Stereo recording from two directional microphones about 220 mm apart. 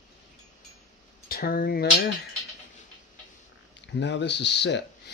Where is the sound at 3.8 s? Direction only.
55° left (ahead or behind).